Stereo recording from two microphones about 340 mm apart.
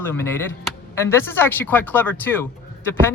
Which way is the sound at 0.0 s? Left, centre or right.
Centre.